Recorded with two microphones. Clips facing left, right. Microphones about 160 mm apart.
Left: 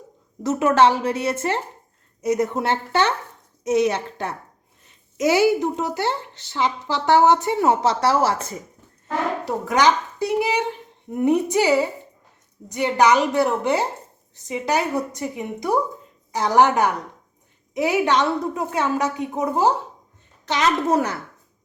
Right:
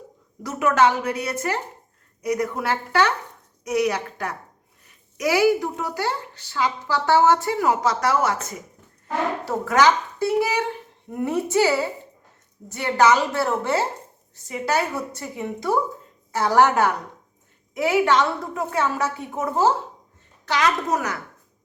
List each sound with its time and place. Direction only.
0.4 s speech: 30° left (ahead or behind)
9.4 s a woman's voice: 15° left (ahead or behind)